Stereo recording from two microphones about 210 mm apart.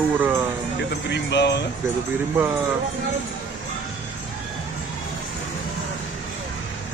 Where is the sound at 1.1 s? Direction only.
55° left (ahead or behind).